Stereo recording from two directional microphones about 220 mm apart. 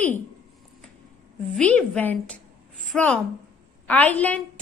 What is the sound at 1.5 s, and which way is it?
A woman's voice, 5° left (ahead or behind).